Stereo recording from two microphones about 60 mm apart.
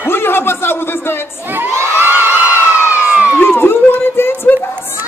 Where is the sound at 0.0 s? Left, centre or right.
Left.